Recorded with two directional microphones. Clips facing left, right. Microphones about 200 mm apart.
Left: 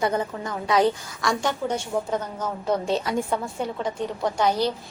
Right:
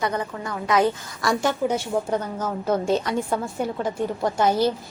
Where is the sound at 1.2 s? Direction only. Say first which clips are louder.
Right 3 dB; 5° right (ahead or behind).